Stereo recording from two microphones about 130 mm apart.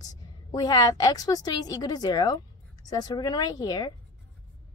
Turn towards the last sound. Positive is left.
turn(degrees=30)  # may be behind; listen again after turning